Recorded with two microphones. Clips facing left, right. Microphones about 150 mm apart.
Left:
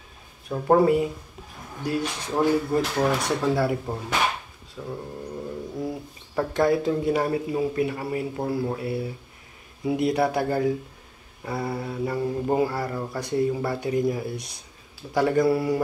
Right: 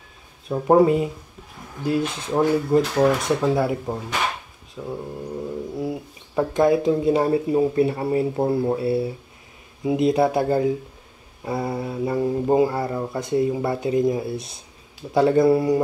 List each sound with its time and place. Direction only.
0.5 s speech: 20° right (ahead or behind)
4.8 s a sound: 10° right (ahead or behind)
5.8 s speech: 15° right (ahead or behind)